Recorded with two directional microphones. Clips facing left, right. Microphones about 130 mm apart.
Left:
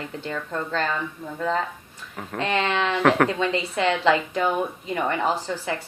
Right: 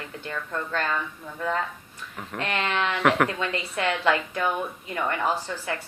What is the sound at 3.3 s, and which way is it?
A woman's voice, 25° left (ahead or behind).